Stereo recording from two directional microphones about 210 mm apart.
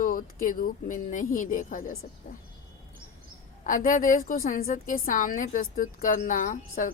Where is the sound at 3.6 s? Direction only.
40° left (ahead or behind).